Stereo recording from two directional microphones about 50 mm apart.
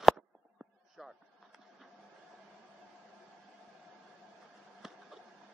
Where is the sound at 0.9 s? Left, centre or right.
Centre.